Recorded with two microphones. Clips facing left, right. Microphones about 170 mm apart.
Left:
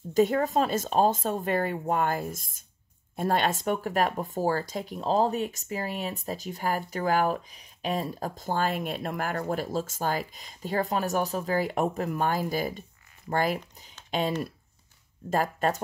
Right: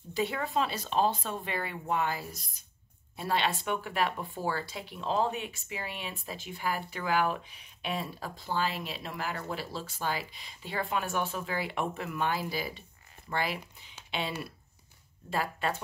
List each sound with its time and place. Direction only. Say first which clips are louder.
0.1 s speech: left 8 dB; 45° left (ahead or behind)
15.2 s speech: left 6 dB; 45° left (ahead or behind)